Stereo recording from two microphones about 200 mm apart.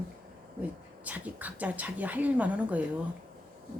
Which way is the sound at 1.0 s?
10° right (ahead or behind).